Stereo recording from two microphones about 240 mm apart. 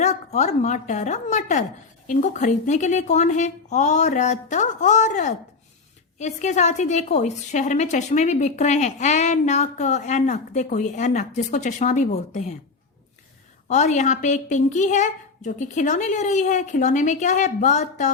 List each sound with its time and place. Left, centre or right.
0.0 s a woman's voice: left
13.7 s a woman's voice: left